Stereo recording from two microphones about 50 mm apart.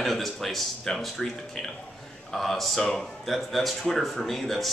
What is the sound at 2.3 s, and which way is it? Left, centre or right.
A man's voice, centre.